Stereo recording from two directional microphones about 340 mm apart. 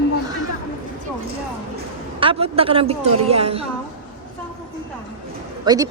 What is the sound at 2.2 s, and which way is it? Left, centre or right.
A woman's voice, centre.